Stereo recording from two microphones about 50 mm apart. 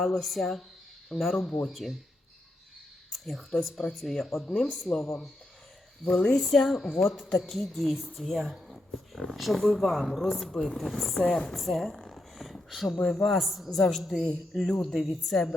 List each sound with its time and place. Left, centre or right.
0.0 s speech: centre
3.1 s speech: centre
10.8 s speech: centre
11.2 s a woman's voice: left
11.5 s speech: centre
12.1 s a sound: centre
12.7 s speech: centre